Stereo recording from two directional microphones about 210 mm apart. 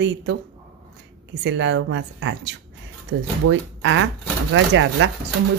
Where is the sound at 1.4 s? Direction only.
60° right (ahead or behind).